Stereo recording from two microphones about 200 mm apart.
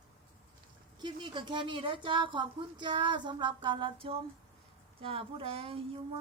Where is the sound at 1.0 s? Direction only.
25° right (ahead or behind).